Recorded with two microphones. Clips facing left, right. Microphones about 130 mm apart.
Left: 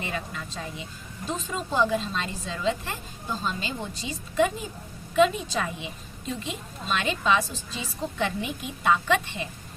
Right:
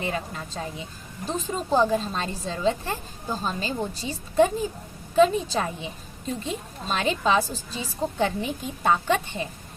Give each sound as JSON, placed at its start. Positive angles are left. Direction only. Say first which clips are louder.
{"t": 0.0, "sound": "a woman's voice", "louder": "right 3 dB", "side_deg": -35}